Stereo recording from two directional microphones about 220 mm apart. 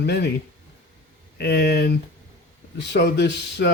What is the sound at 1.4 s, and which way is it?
Speech, 50° left (ahead or behind).